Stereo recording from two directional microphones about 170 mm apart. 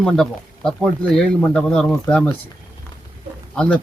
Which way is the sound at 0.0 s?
5° left (ahead or behind).